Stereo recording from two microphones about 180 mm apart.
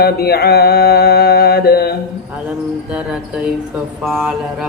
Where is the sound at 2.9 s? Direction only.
5° right (ahead or behind).